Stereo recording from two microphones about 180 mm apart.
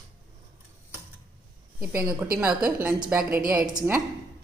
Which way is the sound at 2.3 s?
5° right (ahead or behind).